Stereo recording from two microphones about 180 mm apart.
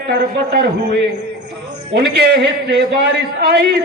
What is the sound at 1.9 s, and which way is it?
Speech, 65° right (ahead or behind).